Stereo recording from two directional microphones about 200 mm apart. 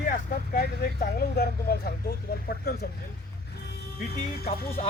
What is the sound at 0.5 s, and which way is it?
Speech, 50° left (ahead or behind).